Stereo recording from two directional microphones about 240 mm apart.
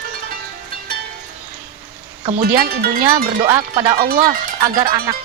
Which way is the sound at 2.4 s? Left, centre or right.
Right.